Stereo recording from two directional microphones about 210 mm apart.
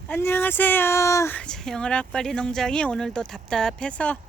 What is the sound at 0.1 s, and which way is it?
A woman's voice, 10° left (ahead or behind).